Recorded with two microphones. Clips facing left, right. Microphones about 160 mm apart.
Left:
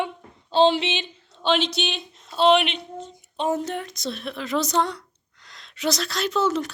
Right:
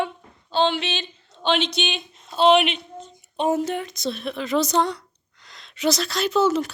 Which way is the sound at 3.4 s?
10° right (ahead or behind).